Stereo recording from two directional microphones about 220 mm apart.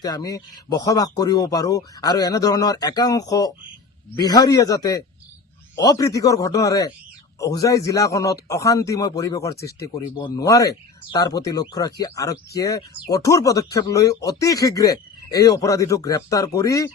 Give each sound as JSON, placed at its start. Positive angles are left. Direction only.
{"t": 0.0, "sound": "speech", "side_deg": 15}